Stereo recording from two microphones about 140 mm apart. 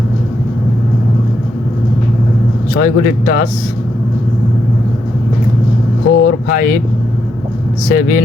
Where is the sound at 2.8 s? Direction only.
90° left.